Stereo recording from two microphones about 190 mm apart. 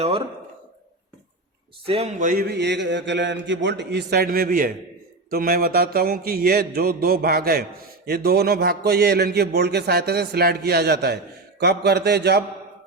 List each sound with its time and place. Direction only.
1.9 s a man's voice: 35° right (ahead or behind)
5.3 s a sound: 50° right (ahead or behind)
8.0 s a man's voice: 55° right (ahead or behind)